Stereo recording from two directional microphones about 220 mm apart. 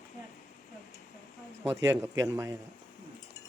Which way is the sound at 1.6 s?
10° right (ahead or behind).